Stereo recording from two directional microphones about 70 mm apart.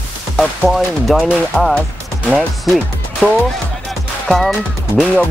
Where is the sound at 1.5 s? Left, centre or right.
Centre.